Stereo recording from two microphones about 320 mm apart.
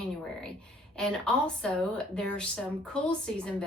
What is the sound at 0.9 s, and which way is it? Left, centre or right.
A woman's voice, centre.